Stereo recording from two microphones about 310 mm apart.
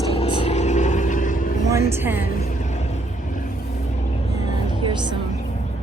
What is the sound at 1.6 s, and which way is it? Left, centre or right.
Speech, centre.